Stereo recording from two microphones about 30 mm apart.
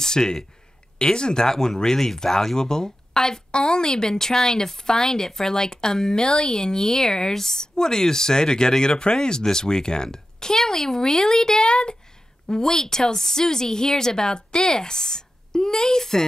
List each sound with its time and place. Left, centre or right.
0.0 s speech: left